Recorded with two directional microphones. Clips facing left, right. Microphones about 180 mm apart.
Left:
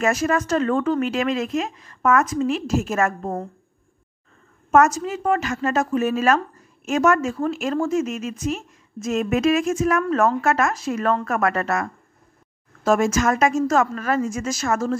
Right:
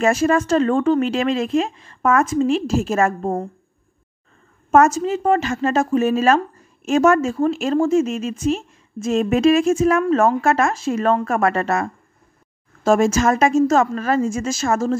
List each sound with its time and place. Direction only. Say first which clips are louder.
0.0 s a woman's voice: right 4 dB; 30° right (ahead or behind)
4.6 s a woman's voice: right 3 dB; 30° right (ahead or behind)